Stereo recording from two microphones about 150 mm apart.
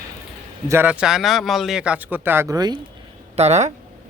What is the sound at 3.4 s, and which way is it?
Speech, 50° right (ahead or behind).